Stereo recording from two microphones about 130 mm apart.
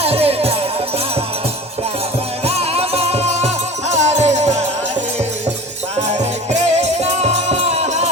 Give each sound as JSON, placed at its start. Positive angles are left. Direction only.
{"t": 0.0, "sound": "music", "side_deg": -50}
{"t": 2.4, "sound": "music", "side_deg": -50}
{"t": 6.0, "sound": "music", "side_deg": -60}